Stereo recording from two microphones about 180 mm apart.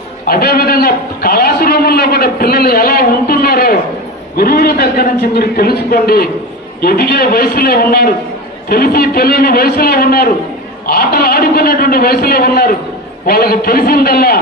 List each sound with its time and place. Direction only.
0.3 s a man's voice: 55° left (ahead or behind)